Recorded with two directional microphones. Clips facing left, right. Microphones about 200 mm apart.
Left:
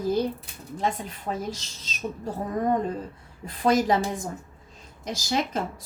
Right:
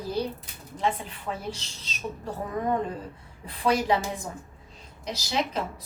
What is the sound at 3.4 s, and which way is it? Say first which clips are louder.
A woman's voice: left 3 dB; 45° left (ahead or behind).